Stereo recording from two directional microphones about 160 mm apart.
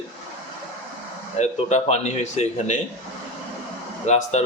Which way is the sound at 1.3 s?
45° left (ahead or behind).